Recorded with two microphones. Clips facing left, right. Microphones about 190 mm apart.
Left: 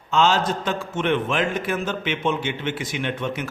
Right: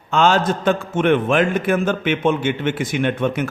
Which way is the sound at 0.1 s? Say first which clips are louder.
Right 3 dB; 55° right (ahead or behind).